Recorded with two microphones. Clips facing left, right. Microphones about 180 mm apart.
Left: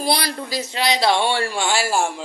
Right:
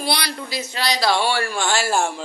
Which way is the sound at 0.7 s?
25° left (ahead or behind).